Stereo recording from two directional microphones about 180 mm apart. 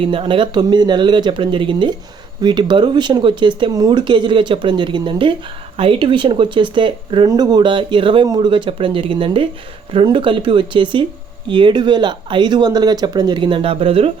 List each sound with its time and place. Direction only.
0.0 s speech: 30° right (ahead or behind)